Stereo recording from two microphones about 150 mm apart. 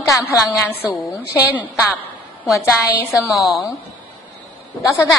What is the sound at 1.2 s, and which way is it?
Speech, 10° left (ahead or behind).